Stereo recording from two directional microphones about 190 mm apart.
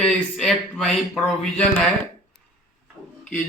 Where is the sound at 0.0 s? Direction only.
Centre (ahead or behind).